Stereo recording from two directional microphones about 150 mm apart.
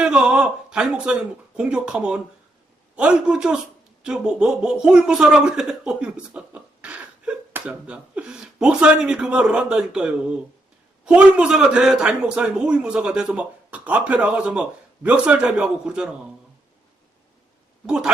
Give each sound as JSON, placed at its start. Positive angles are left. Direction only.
{"t": 0.0, "sound": "a sound", "side_deg": -5}
{"t": 1.5, "sound": "a man's voice", "side_deg": -5}
{"t": 17.8, "sound": "a man's voice", "side_deg": -5}